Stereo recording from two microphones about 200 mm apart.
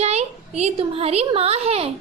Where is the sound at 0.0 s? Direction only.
35° right (ahead or behind).